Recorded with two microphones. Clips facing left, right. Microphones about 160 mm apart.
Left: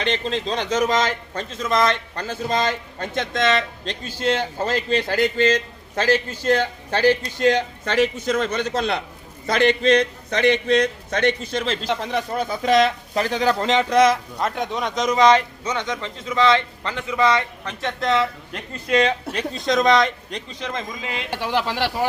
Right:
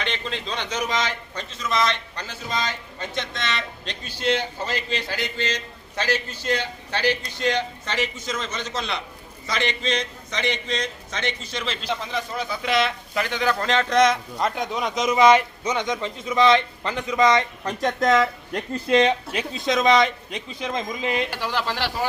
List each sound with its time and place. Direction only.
0.0 s a man's voice: 35° left (ahead or behind)
11.9 s speech: 60° left (ahead or behind); by 13.6 s 35° left (ahead or behind)
13.6 s speech: 20° left (ahead or behind)
13.9 s speech: 5° left (ahead or behind); by 17.4 s 15° right (ahead or behind)
17.7 s speech: 40° right (ahead or behind)
18.9 s speech: 25° right (ahead or behind)
19.3 s a man's voice: 5° right (ahead or behind)
21.2 s speech: 20° left (ahead or behind)